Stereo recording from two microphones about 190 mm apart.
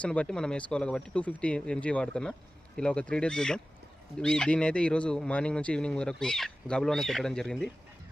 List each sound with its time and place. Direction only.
0.0 s speech: 5° left (ahead or behind)